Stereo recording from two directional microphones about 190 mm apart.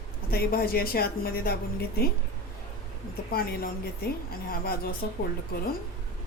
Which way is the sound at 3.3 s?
50° left (ahead or behind).